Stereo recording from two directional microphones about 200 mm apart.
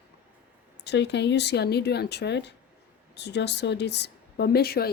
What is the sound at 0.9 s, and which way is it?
Speech, 60° left (ahead or behind).